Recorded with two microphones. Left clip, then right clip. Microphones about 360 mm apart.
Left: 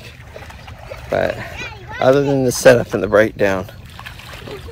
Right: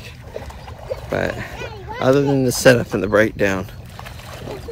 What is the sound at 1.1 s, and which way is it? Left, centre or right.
Speech, centre.